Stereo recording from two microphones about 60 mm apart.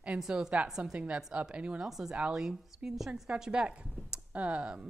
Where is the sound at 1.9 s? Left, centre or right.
Centre.